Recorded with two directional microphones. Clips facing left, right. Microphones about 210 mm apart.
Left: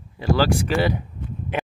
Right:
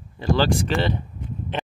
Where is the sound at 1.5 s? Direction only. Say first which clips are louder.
Left 3 dB; 10° left (ahead or behind).